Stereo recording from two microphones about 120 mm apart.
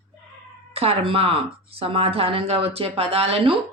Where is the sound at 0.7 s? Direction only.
55° right (ahead or behind).